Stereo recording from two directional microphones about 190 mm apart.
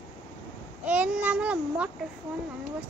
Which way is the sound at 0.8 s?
10° right (ahead or behind).